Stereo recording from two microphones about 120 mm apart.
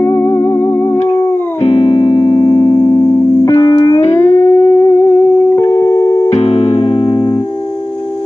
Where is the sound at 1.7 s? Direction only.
45° left (ahead or behind); by 6.3 s 25° left (ahead or behind).